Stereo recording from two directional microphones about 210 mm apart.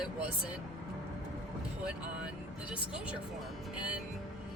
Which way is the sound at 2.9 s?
5° right (ahead or behind).